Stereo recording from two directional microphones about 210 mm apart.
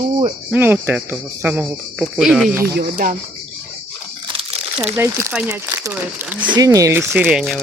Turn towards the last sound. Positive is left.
turn(degrees=0)  # may be behind; listen again after turning